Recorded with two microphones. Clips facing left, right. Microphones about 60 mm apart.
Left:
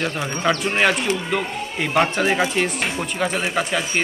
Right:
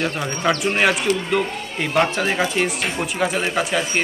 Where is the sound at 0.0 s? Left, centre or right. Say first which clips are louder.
Right 1 dB; centre.